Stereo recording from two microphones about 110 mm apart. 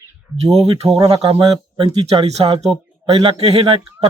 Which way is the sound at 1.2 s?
55° right (ahead or behind).